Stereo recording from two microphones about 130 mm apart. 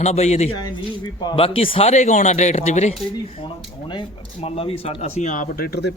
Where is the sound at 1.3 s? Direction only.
45° left (ahead or behind).